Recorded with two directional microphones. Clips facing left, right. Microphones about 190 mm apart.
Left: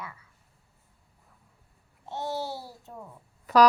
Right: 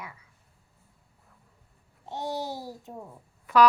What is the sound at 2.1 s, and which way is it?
Speech, 15° right (ahead or behind).